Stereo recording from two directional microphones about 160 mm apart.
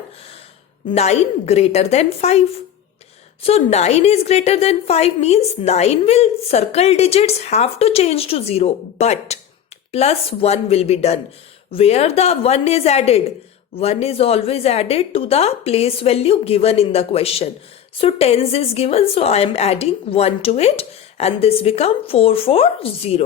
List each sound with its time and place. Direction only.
0.9 s a woman's voice: 40° left (ahead or behind)